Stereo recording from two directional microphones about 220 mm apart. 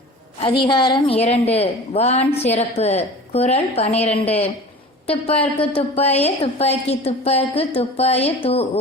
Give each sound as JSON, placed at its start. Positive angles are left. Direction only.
{"t": 0.3, "sound": "a woman's voice", "side_deg": 25}